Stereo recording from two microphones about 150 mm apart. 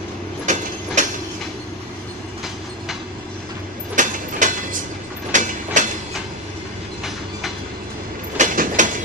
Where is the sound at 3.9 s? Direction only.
60° right (ahead or behind).